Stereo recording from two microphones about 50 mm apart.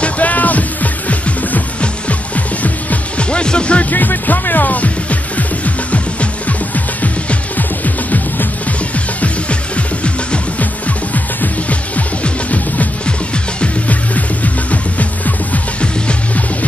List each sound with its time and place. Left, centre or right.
0.0 s music: left
3.3 s speech: centre
3.9 s speech: left
6.4 s music: left
9.2 s music: left